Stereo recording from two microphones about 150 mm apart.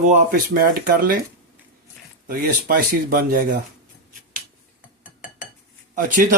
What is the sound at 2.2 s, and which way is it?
Speech, 80° right.